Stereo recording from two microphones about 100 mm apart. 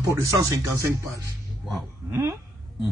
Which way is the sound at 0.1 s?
35° right (ahead or behind).